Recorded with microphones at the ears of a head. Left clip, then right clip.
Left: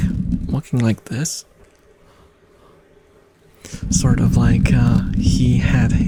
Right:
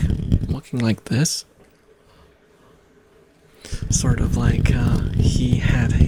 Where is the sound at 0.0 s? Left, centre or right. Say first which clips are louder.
Left 2 dB; left.